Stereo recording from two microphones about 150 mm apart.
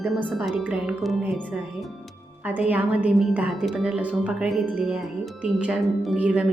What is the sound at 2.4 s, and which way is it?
A woman's voice, 10° right (ahead or behind).